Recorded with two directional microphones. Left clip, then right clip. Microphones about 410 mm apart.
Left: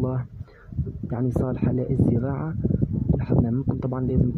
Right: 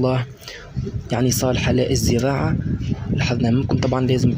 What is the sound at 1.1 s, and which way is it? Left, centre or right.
Speech, left.